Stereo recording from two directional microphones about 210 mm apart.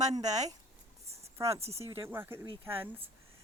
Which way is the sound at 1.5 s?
30° right (ahead or behind).